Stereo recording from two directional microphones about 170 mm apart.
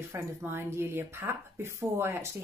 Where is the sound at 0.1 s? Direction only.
15° right (ahead or behind).